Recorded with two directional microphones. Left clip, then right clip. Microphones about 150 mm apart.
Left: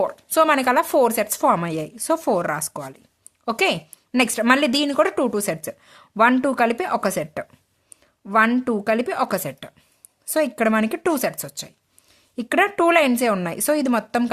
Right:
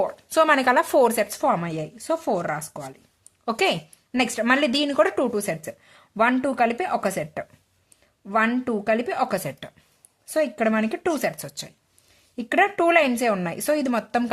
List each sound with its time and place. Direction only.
0.0 s speech: 25° left (ahead or behind)
1.4 s speech: 35° left (ahead or behind)
3.4 s speech: 20° left (ahead or behind)
10.2 s speech: 35° left (ahead or behind)